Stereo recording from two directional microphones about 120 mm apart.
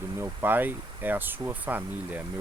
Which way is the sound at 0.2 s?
15° right (ahead or behind).